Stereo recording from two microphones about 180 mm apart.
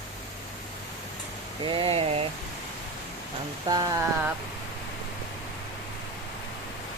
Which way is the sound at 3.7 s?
20° right (ahead or behind).